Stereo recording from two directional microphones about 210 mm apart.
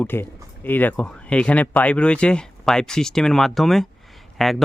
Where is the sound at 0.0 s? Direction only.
10° left (ahead or behind).